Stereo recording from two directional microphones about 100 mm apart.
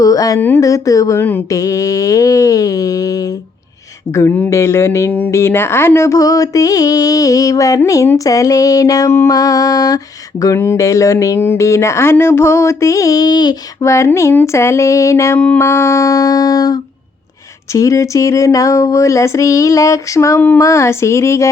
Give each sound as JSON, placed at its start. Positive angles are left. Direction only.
{"t": 0.0, "sound": "a sound", "side_deg": 35}
{"t": 0.3, "sound": "speech", "side_deg": 20}
{"t": 0.6, "sound": "speech", "side_deg": 35}
{"t": 1.2, "sound": "speech", "side_deg": 20}
{"t": 1.5, "sound": "speech", "side_deg": 35}
{"t": 4.1, "sound": "speech", "side_deg": 25}
{"t": 13.8, "sound": "speech", "side_deg": 30}